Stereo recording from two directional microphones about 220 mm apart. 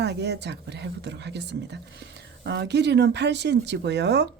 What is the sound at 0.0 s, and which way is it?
Speech, 50° right (ahead or behind).